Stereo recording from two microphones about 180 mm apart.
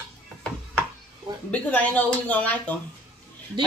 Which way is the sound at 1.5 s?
10° left (ahead or behind).